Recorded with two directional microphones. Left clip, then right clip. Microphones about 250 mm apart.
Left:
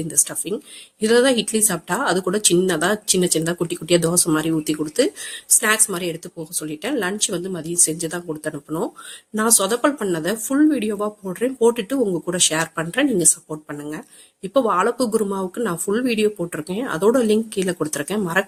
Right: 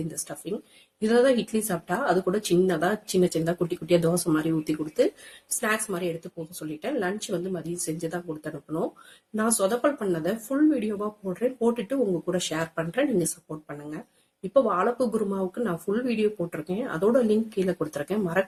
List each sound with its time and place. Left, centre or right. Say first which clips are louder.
0.4 s speech: left 6 dB; left
14.5 s speech: left 4 dB; left